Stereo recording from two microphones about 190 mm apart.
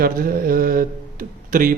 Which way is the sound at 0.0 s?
50° right (ahead or behind).